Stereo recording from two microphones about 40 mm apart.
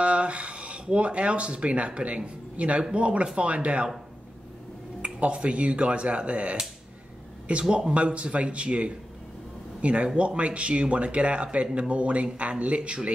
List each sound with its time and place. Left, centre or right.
0.0 s speech: right
5.0 s speech: right